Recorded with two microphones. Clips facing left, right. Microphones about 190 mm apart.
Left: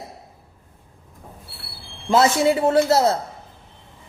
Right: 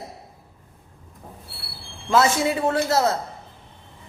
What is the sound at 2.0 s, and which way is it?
A man's voice, 30° left (ahead or behind).